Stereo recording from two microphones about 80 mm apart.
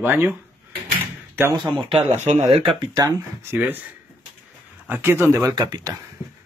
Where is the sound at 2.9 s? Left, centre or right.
Right.